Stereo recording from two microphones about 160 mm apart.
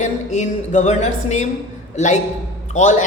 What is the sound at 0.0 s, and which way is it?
Speech, 50° left (ahead or behind).